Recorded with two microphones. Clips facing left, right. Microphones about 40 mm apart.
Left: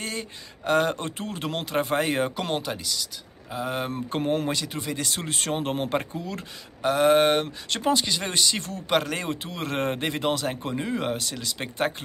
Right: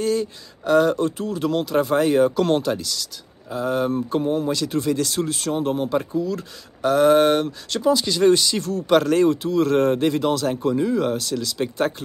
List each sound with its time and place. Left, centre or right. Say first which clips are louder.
0.0 s speech: right 11 dB; left
4.1 s speech: right 4 dB; left
4.6 s speech: right 8 dB; centre; by 6.4 s left
6.8 s speech: right 4 dB; centre
8.8 s speech: right 9 dB; centre
9.3 s speech: right 11 dB; left